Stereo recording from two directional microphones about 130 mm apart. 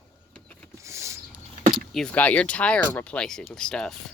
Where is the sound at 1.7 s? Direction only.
Centre (ahead or behind).